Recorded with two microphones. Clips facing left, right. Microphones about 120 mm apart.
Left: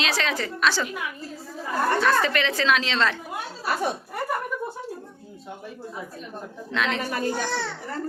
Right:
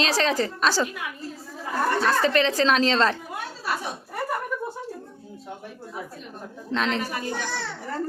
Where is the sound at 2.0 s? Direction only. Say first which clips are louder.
Right 1 dB; 35° right (ahead or behind).